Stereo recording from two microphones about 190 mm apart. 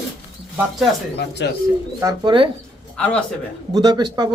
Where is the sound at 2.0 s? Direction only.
20° right (ahead or behind).